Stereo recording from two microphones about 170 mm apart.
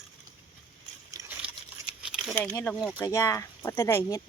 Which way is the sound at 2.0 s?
5° right (ahead or behind).